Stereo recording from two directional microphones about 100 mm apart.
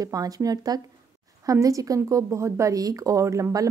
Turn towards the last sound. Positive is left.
turn(degrees=-35)  # may be behind; listen again after turning